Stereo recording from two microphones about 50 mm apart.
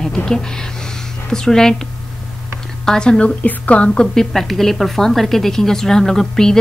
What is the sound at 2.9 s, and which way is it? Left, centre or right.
Speech, centre.